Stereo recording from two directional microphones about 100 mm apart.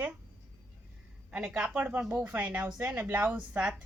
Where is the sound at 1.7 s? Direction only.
15° right (ahead or behind).